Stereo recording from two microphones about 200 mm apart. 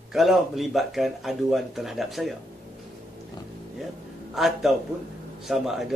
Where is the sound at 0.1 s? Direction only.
Centre (ahead or behind).